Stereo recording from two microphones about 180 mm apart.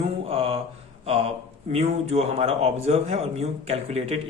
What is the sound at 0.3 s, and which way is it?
Mantra, 30° right (ahead or behind).